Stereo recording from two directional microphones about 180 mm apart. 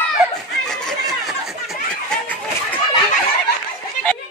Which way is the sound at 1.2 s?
Centre (ahead or behind).